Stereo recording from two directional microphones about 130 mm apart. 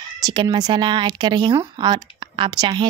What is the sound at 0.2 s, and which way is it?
A woman's voice, 35° right (ahead or behind).